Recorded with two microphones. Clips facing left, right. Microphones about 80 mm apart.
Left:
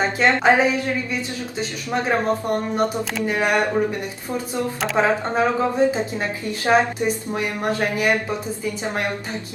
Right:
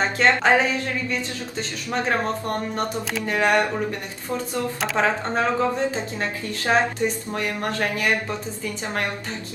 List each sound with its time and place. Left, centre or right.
0.2 s speech: centre
1.9 s speech: centre
4.9 s speech: centre